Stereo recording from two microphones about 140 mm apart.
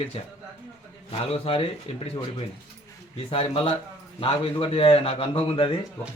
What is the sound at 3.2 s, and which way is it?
Speech, 40° left (ahead or behind).